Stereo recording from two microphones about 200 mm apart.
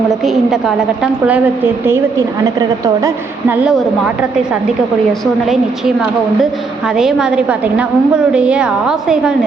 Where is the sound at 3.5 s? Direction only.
5° right (ahead or behind).